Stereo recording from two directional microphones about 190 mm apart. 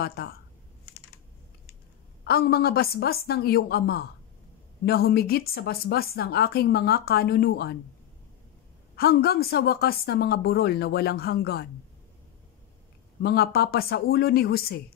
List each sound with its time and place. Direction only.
0.0 s speech: 55° left (ahead or behind)
2.2 s speech: 55° left (ahead or behind)
8.9 s speech: 55° left (ahead or behind)
13.2 s speech: 55° left (ahead or behind)